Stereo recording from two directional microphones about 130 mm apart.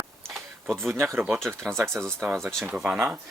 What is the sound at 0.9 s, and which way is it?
Speech, 15° right (ahead or behind).